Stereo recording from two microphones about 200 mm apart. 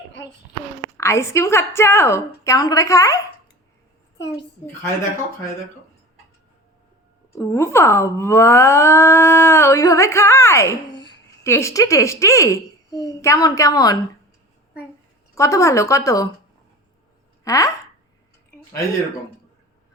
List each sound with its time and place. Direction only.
0.9 s speech: 15° left (ahead or behind)
7.3 s a woman's voice: 15° left (ahead or behind)
15.4 s speech: 15° left (ahead or behind)
17.4 s speech: 15° left (ahead or behind)